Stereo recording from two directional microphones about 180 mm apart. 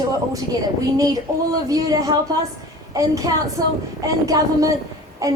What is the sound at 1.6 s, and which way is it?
A woman's voice, 20° right (ahead or behind).